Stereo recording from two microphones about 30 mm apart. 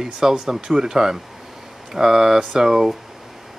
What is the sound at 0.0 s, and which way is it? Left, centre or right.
Speech, centre.